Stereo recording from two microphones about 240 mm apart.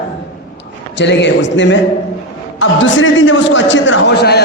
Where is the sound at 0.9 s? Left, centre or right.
Left.